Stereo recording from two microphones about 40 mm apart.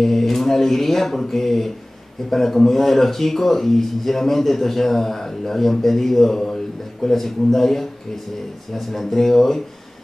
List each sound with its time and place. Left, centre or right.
0.0 s speech: centre